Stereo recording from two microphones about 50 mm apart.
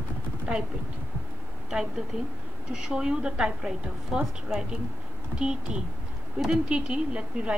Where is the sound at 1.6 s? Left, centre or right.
Centre.